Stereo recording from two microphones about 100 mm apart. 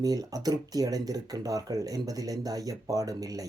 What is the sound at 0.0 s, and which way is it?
Speech, 40° right (ahead or behind).